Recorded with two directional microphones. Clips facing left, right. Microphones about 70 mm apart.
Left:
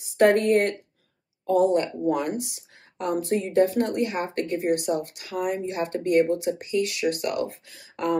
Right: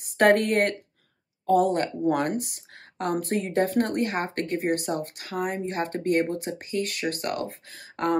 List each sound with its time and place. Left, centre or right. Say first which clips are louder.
0.0 s speech: left 1 dB; right